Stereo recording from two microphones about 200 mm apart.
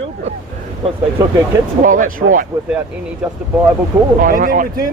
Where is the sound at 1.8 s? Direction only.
40° right (ahead or behind).